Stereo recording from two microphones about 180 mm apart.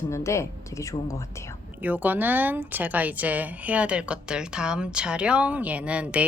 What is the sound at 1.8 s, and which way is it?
Speech, 10° right (ahead or behind).